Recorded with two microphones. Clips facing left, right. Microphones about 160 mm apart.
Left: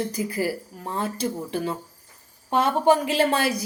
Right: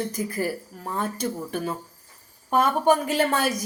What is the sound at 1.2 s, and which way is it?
Speech, 30° left (ahead or behind).